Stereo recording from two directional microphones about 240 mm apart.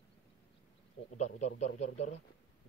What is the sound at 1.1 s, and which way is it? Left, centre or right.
A man's voice, left.